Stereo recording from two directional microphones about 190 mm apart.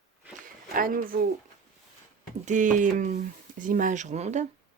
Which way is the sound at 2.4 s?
40° right (ahead or behind).